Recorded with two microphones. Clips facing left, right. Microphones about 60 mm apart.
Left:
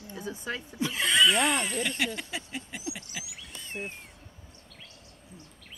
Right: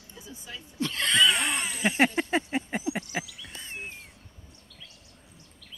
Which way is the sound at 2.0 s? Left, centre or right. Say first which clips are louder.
Right 8 dB; right.